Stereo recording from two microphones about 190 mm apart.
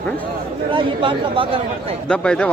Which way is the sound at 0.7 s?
25° right (ahead or behind).